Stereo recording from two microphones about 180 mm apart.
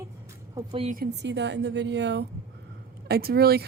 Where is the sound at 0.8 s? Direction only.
55° right (ahead or behind); by 2.2 s 75° right (ahead or behind).